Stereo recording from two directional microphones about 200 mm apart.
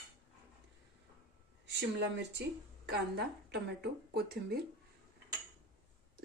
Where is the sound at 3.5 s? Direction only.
50° right (ahead or behind).